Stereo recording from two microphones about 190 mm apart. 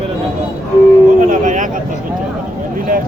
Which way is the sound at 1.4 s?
40° right (ahead or behind).